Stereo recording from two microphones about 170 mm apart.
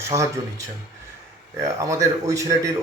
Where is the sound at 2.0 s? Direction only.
20° right (ahead or behind).